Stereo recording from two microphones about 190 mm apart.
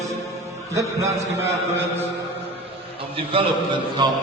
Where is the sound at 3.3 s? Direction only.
25° right (ahead or behind).